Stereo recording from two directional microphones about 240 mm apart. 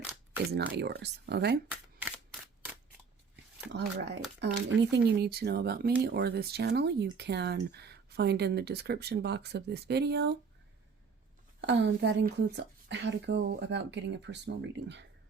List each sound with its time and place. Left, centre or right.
0.5 s speech: right
1.7 s single-lens reflex camera: centre
3.7 s speech: right
11.6 s speech: right